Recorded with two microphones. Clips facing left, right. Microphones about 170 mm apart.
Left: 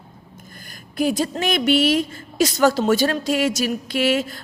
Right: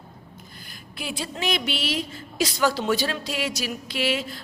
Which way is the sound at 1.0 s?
45° left (ahead or behind).